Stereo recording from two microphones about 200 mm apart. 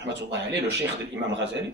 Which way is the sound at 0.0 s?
60° right (ahead or behind).